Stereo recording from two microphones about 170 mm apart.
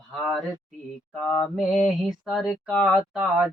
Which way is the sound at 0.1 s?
Centre (ahead or behind).